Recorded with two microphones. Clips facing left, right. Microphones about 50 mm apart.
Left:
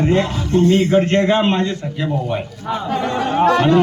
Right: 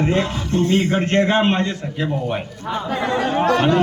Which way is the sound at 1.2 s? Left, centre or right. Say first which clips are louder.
Left 2 dB; centre.